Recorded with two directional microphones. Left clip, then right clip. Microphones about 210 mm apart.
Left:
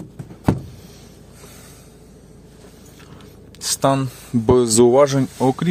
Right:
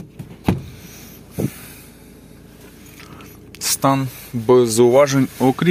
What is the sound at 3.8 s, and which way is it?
Speech, 25° left (ahead or behind).